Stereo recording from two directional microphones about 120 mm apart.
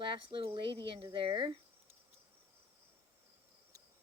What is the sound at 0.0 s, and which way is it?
Speech, 45° right (ahead or behind).